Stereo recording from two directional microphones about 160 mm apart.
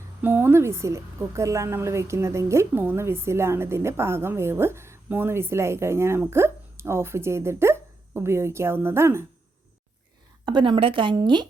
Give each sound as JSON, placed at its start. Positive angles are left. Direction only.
{"t": 0.2, "sound": "a woman's voice", "side_deg": -15}
{"t": 10.4, "sound": "speech", "side_deg": -30}